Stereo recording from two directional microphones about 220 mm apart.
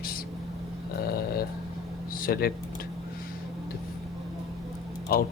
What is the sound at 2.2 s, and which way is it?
Speech, 45° left (ahead or behind).